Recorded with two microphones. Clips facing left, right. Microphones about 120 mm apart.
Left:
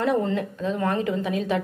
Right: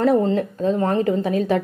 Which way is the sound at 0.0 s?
35° right (ahead or behind).